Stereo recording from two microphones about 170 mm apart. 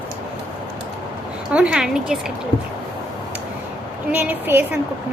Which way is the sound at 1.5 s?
5° right (ahead or behind).